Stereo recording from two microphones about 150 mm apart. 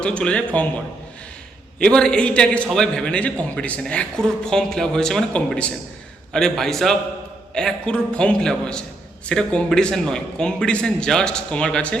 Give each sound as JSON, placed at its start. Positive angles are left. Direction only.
{"t": 0.0, "sound": "a man's voice", "side_deg": 5}
{"t": 1.8, "sound": "a man's voice", "side_deg": 5}